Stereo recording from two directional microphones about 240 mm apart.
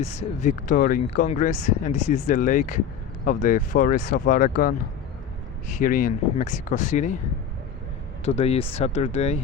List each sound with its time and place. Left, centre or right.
0.0 s speech: left
8.2 s speech: left